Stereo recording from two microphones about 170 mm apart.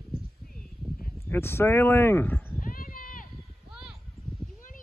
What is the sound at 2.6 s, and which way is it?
Horse, 55° left (ahead or behind).